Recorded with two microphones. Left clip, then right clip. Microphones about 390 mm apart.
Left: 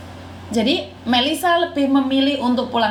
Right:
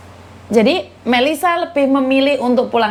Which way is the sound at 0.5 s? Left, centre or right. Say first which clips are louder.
Right 6 dB; right.